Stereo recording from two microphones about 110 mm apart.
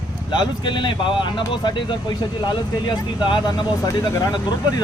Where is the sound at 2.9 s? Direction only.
45° left (ahead or behind).